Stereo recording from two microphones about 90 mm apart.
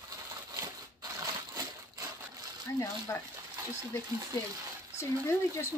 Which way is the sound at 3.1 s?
30° left (ahead or behind).